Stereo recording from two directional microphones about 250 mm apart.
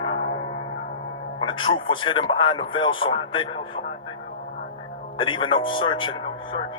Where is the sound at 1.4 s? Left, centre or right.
Centre.